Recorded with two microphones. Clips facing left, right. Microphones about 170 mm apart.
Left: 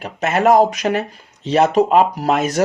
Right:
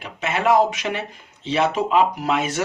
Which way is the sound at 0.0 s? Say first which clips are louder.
Left 6 dB; 45° left (ahead or behind).